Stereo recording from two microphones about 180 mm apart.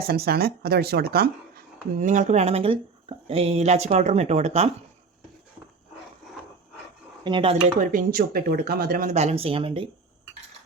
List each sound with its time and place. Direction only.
0.0 s speech: 60° right (ahead or behind); by 4.7 s 35° right (ahead or behind)
7.3 s speech: 25° right (ahead or behind)
7.8 s speech: 50° right (ahead or behind); by 9.9 s 30° right (ahead or behind)